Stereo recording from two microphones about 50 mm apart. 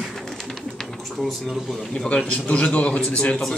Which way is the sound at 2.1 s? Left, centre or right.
Left.